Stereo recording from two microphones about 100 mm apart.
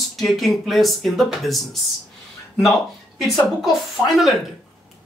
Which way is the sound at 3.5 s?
Centre (ahead or behind).